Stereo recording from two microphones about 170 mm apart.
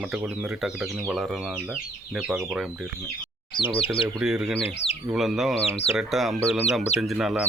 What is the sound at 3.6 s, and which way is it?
Speech, 30° left (ahead or behind).